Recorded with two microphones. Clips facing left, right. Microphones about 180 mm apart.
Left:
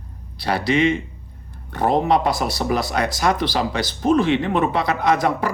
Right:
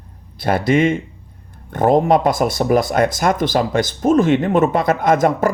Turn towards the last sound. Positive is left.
turn(degrees=-45)  # may be behind; listen again after turning